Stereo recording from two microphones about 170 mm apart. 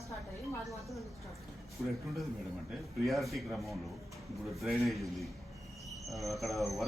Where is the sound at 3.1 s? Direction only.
Centre (ahead or behind).